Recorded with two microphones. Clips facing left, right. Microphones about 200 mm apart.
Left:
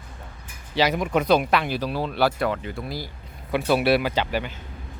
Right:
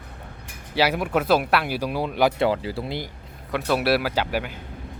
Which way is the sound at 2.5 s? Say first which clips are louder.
Right 3 dB; 30° right (ahead or behind).